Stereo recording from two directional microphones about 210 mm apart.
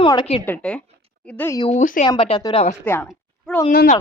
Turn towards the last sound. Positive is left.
turn(degrees=40)  # may be behind; listen again after turning